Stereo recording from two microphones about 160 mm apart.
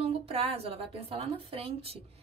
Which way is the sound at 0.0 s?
40° right (ahead or behind).